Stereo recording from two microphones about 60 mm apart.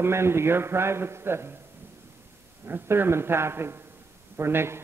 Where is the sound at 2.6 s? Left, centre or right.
Right.